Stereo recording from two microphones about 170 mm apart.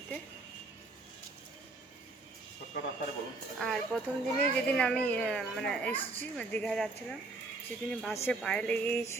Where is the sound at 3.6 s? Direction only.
Centre (ahead or behind).